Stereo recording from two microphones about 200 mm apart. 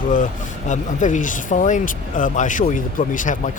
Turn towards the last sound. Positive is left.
turn(degrees=40)  # may be behind; listen again after turning